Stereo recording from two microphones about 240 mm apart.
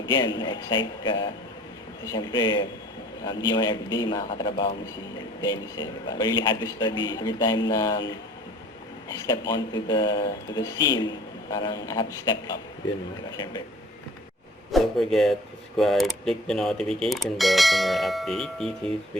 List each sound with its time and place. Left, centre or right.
0.3 s a man's voice: centre
14.7 s speech: centre